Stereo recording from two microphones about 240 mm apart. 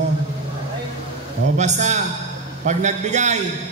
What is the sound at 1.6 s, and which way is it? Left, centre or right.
A man's voice, right.